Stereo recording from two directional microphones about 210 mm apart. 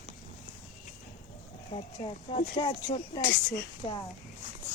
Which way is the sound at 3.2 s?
50° left (ahead or behind).